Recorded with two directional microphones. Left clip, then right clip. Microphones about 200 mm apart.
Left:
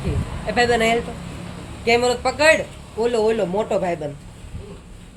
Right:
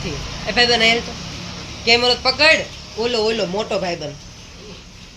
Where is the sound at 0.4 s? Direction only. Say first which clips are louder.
Right 3 dB; centre (ahead or behind).